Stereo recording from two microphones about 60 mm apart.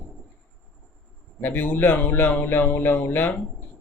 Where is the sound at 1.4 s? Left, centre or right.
Left.